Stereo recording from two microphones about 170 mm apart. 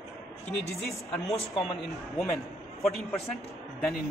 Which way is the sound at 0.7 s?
Centre (ahead or behind).